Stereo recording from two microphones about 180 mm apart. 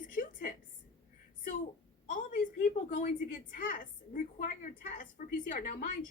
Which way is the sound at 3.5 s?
50° left (ahead or behind).